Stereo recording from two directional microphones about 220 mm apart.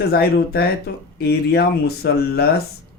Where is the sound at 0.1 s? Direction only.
45° left (ahead or behind).